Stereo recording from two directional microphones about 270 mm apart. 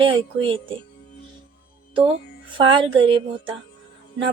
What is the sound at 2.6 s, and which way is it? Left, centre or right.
Speech, centre.